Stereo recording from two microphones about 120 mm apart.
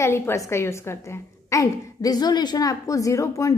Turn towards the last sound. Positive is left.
turn(degrees=25)  # may be behind; listen again after turning